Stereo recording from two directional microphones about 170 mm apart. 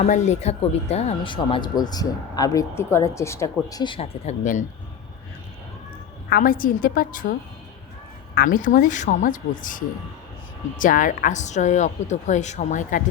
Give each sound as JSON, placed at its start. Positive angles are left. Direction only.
{"t": 0.0, "sound": "speech", "side_deg": 40}
{"t": 6.3, "sound": "a woman's voice", "side_deg": 55}
{"t": 8.4, "sound": "a woman's voice", "side_deg": 50}